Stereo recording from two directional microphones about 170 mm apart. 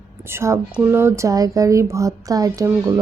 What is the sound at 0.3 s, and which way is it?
Speech, 15° right (ahead or behind).